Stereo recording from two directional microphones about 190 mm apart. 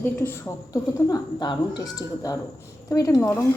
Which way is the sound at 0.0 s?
10° left (ahead or behind).